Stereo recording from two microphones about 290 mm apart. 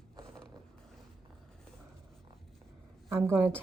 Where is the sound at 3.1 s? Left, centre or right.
Centre.